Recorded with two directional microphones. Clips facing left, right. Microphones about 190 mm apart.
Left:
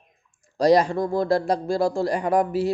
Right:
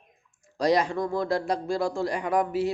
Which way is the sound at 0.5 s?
35° left (ahead or behind).